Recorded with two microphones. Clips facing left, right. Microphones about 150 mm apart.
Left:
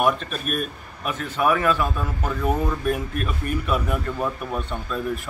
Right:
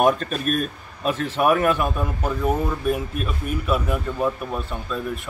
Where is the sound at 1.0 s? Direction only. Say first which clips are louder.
Right 3 dB; 25° right (ahead or behind).